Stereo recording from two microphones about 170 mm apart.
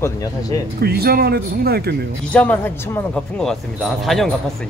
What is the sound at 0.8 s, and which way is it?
Speech, 65° right (ahead or behind).